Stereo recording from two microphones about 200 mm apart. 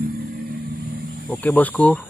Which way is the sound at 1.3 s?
10° left (ahead or behind).